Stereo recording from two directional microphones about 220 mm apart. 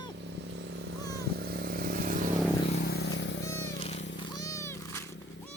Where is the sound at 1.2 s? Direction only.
45° right (ahead or behind).